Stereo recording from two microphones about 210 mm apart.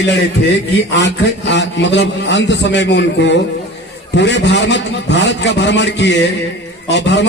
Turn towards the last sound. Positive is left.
turn(degrees=55)  # may be behind; listen again after turning